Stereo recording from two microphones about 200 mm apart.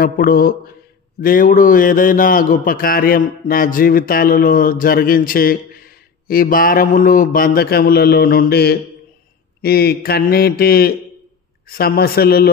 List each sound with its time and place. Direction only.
0.0 s a man's voice: 50° left (ahead or behind)